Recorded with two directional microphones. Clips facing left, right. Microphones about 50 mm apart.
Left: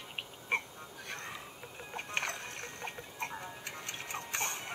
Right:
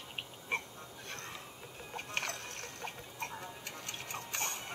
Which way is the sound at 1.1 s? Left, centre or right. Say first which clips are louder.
Left 3 dB; left.